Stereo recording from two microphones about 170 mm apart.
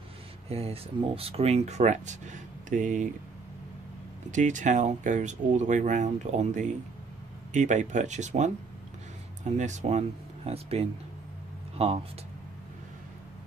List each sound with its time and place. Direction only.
0.5 s speech: 35° right (ahead or behind)
4.3 s speech: 45° right (ahead or behind)